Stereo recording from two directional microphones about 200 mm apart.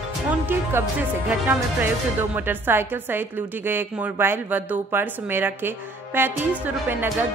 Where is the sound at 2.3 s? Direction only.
10° right (ahead or behind).